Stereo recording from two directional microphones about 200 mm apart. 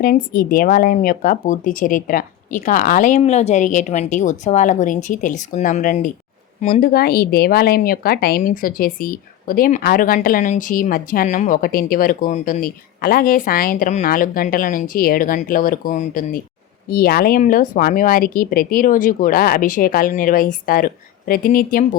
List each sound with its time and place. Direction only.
0.0 s a woman's voice: 45° left (ahead or behind)